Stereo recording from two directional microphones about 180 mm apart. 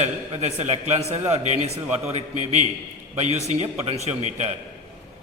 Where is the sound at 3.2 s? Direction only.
35° right (ahead or behind).